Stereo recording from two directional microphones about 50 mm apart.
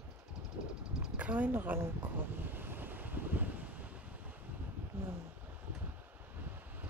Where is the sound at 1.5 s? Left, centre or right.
Right.